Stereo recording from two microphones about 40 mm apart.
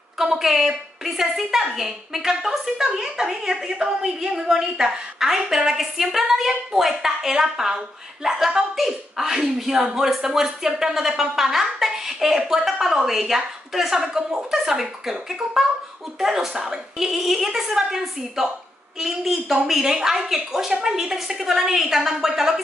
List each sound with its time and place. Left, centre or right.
0.2 s a woman's voice: centre
17.1 s a woman's voice: centre